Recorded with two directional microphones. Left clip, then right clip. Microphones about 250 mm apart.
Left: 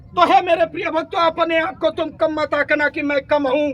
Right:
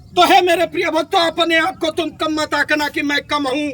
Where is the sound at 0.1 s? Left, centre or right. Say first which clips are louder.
Right 2 dB; centre.